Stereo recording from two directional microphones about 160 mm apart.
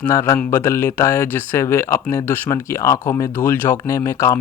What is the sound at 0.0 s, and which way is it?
Speech, 20° left (ahead or behind).